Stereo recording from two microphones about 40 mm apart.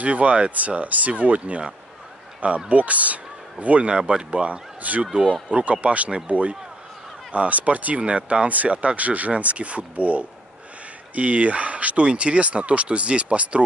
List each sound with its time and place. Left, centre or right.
0.0 s speech: right
2.7 s a man's voice: right